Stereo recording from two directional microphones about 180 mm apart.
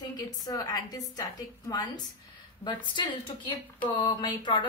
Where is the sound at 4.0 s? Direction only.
25° left (ahead or behind).